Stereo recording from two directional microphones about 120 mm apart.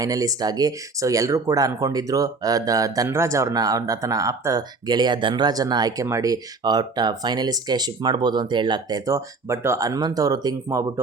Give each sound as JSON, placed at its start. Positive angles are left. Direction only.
{"t": 0.0, "sound": "speech", "side_deg": -30}